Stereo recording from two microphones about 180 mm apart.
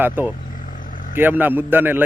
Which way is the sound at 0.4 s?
50° left (ahead or behind).